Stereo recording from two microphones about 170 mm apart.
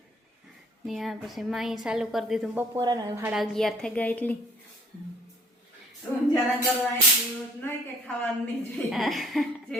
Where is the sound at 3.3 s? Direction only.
Centre (ahead or behind).